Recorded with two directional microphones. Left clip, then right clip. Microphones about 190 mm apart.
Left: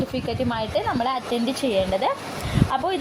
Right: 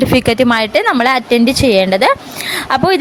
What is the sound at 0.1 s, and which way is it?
A woman's voice, 40° right (ahead or behind).